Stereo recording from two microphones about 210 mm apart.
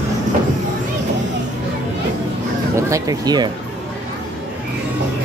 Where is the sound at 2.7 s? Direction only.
15° right (ahead or behind).